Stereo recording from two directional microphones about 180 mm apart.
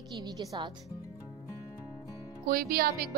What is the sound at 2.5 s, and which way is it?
Speech, 55° right (ahead or behind).